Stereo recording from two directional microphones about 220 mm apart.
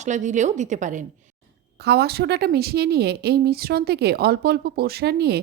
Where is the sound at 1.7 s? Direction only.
50° right (ahead or behind).